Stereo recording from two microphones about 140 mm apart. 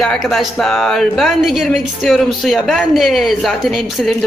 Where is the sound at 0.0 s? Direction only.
Centre (ahead or behind).